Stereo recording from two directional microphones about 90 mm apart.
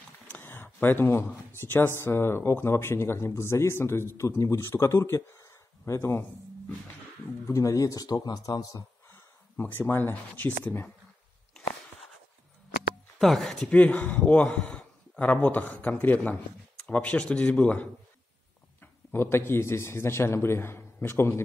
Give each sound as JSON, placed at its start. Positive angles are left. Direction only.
{"t": 0.3, "sound": "speech", "side_deg": 25}
{"t": 7.4, "sound": "speech", "side_deg": 35}
{"t": 9.6, "sound": "speech", "side_deg": 25}
{"t": 13.2, "sound": "speech", "side_deg": 5}
{"t": 13.7, "sound": "a man's voice", "side_deg": 15}
{"t": 18.8, "sound": "a man's voice", "side_deg": 25}